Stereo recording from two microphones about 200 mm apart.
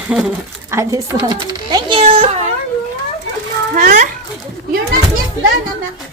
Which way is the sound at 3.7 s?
40° right (ahead or behind).